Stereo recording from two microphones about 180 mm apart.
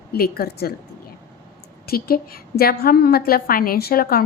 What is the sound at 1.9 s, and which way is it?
A woman's voice, 55° left (ahead or behind).